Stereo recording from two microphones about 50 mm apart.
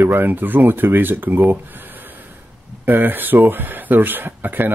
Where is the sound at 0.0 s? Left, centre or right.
Right.